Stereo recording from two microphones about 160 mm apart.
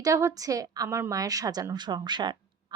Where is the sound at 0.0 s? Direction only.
20° right (ahead or behind).